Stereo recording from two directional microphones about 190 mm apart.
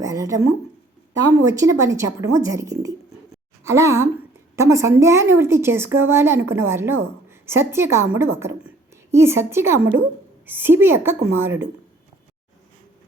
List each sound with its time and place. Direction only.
0.0 s a woman's voice: 20° right (ahead or behind)
1.5 s a woman's voice: 15° right (ahead or behind)